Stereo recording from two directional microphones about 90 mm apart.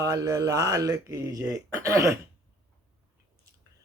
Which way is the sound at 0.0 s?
40° right (ahead or behind).